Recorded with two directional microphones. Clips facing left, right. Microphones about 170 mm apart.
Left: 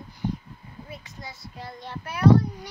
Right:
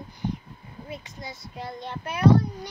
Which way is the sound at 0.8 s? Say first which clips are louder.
Right 4 dB; 20° right (ahead or behind).